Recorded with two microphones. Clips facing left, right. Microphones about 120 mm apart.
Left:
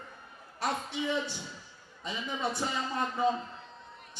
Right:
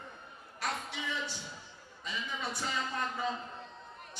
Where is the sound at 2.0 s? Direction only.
25° left (ahead or behind).